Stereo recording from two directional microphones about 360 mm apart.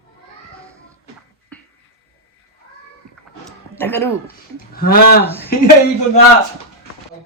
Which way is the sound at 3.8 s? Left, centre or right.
Centre.